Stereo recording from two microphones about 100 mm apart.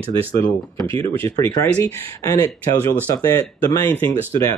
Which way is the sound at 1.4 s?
30° left (ahead or behind).